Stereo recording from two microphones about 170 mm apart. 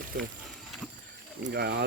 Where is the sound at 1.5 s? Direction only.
70° right (ahead or behind).